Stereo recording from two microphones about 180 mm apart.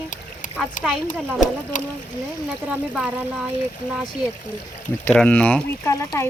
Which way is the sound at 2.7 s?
5° right (ahead or behind).